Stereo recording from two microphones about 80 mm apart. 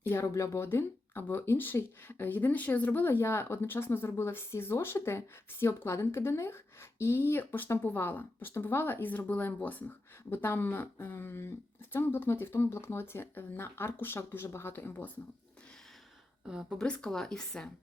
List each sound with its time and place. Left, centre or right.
0.1 s speech: left
16.5 s speech: centre
16.7 s speech: centre